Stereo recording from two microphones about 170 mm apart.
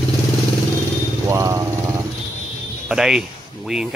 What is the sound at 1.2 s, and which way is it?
Motorcycle, 15° right (ahead or behind).